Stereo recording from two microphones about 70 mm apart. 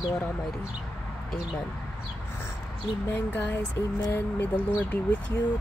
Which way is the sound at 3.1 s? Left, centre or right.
Left.